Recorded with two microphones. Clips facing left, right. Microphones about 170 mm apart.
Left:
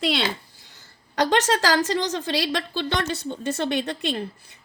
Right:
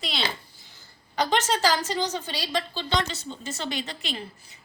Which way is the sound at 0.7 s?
80° left.